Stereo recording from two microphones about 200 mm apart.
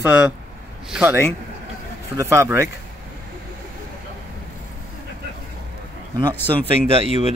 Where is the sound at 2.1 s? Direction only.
15° right (ahead or behind).